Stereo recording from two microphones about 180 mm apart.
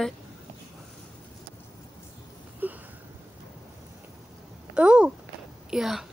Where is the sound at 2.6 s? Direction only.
10° right (ahead or behind).